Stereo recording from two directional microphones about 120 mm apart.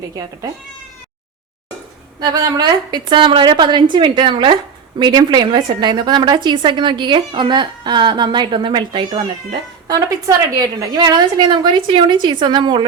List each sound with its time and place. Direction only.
2.1 s a woman's voice: 35° right (ahead or behind)